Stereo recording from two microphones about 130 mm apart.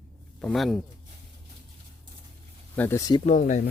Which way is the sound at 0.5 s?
Centre (ahead or behind).